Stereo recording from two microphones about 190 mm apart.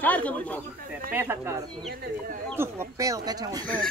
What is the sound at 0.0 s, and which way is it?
Speech, 10° left (ahead or behind).